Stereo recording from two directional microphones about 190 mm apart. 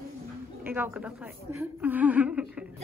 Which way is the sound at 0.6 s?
10° right (ahead or behind).